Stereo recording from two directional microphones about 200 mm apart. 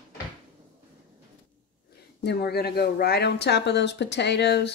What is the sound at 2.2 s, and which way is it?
Speech, 55° left (ahead or behind).